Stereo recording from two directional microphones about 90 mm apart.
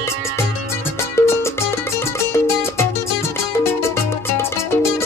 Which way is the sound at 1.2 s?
30° left (ahead or behind).